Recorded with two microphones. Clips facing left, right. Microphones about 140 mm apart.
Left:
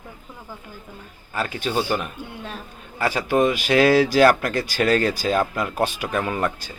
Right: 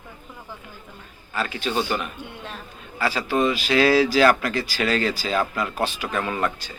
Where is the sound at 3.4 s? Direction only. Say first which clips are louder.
Left 2 dB; 55° left (ahead or behind).